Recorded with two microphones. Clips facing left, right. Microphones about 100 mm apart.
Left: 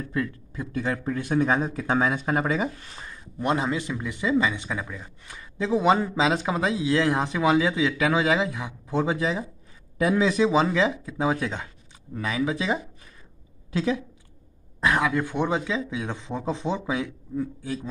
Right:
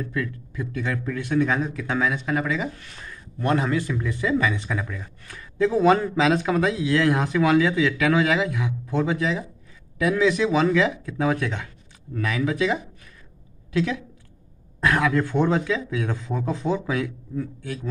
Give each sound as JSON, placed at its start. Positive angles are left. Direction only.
{"t": 0.1, "sound": "speech", "side_deg": 30}
{"t": 3.0, "sound": "speech", "side_deg": 20}
{"t": 6.1, "sound": "a woman's voice", "side_deg": 25}
{"t": 14.9, "sound": "speech", "side_deg": 15}